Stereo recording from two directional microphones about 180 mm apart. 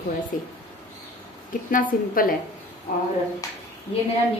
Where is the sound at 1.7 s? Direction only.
50° left (ahead or behind).